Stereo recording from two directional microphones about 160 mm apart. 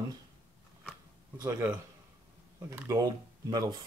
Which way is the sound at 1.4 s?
15° right (ahead or behind).